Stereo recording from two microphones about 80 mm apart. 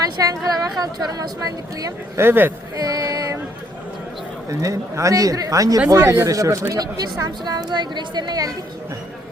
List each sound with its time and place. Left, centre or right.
0.2 s a woman's voice: right
2.1 s speech: right
2.7 s music: right
4.4 s a woman's voice: right